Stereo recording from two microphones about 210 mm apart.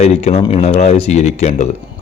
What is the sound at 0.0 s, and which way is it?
A man's voice, 30° left (ahead or behind).